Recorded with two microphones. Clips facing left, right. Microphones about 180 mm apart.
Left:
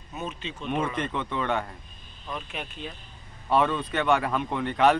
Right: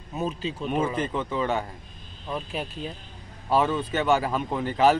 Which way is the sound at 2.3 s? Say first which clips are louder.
Right 5 dB; 35° right (ahead or behind).